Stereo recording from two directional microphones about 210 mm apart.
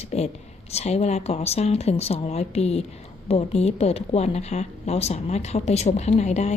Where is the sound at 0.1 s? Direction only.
30° left (ahead or behind).